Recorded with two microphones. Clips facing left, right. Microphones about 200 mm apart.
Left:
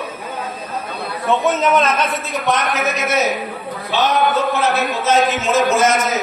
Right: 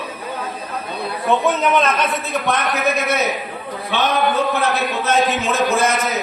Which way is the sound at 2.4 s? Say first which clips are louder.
Left 1 dB; 60° right (ahead or behind).